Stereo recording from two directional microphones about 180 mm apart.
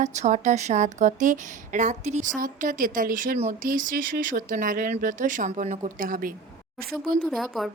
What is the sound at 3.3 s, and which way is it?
Speech, 35° right (ahead or behind).